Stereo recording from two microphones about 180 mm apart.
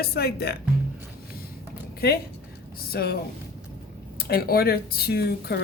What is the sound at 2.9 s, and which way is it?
Speech, 60° left (ahead or behind).